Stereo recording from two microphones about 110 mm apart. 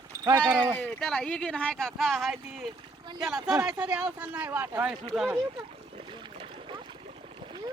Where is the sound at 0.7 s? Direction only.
5° left (ahead or behind); by 4.9 s 15° right (ahead or behind).